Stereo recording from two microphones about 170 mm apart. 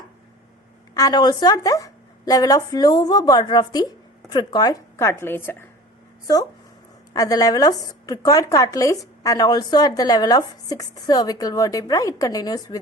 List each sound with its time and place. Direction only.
0.9 s a woman's voice: 20° left (ahead or behind)